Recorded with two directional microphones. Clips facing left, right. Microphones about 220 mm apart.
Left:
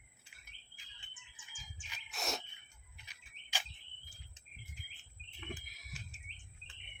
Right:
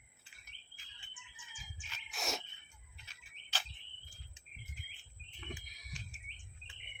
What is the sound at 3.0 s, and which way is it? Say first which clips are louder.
Bird: even; 15° left (ahead or behind).